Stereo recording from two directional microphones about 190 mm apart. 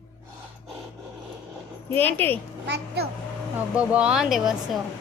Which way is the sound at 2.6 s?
60° right (ahead or behind).